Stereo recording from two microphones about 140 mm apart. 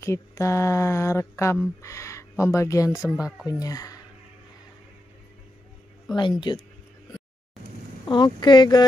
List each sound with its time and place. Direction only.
0.0 s speech: 20° left (ahead or behind)
6.1 s speech: 35° left (ahead or behind)
8.0 s speech: 30° left (ahead or behind)